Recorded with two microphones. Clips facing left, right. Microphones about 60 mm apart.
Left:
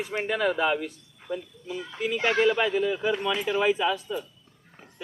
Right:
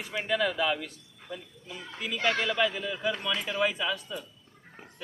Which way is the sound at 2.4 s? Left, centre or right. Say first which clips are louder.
Left 6 dB; left.